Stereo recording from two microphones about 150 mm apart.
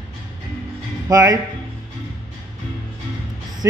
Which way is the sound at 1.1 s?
25° right (ahead or behind).